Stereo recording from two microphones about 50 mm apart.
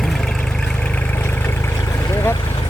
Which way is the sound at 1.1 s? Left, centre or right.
Left.